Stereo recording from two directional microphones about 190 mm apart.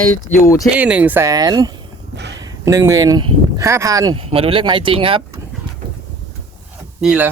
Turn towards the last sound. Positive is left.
turn(degrees=-5)  # may be behind; listen again after turning